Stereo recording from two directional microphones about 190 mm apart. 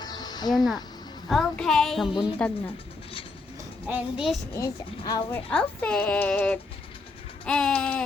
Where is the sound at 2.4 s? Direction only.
5° left (ahead or behind).